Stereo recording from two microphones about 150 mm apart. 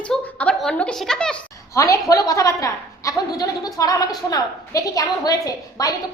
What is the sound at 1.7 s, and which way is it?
A woman's voice, 20° left (ahead or behind).